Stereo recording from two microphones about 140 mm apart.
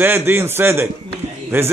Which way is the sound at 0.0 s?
15° right (ahead or behind).